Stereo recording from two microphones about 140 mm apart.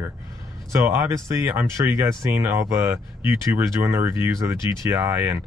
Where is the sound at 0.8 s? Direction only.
20° right (ahead or behind).